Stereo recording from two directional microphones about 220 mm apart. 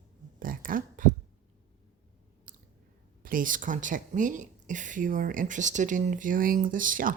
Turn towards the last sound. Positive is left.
turn(degrees=-40)  # may be behind; listen again after turning